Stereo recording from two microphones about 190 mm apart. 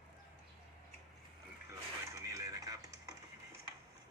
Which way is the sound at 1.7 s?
15° right (ahead or behind).